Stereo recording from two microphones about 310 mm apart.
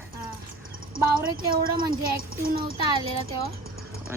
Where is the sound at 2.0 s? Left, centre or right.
Right.